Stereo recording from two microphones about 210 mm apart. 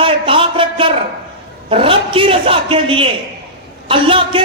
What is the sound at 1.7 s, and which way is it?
A man's voice, 25° right (ahead or behind).